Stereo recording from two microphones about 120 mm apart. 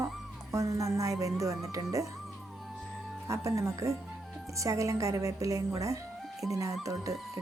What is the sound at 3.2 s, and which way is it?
Speech, 25° right (ahead or behind).